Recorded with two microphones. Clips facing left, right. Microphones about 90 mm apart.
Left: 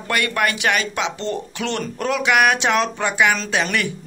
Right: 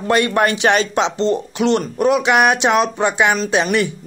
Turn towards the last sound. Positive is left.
turn(degrees=-20)  # may be behind; listen again after turning